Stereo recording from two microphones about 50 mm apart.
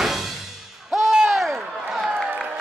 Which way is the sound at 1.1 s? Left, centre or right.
Centre.